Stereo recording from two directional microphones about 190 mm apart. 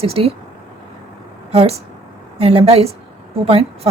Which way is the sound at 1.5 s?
35° right (ahead or behind).